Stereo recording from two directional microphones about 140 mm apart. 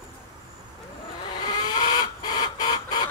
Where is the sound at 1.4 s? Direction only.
30° left (ahead or behind).